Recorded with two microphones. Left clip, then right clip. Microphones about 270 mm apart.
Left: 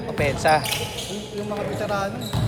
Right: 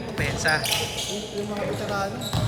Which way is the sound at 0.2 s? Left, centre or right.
Centre.